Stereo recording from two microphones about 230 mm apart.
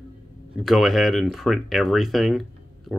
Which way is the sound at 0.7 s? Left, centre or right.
Centre.